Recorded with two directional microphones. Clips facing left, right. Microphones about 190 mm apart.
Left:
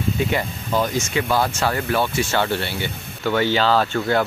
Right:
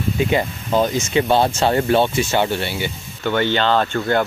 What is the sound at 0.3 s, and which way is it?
Speech, 25° right (ahead or behind).